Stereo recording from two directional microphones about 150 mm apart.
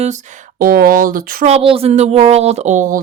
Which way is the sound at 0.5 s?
75° right (ahead or behind).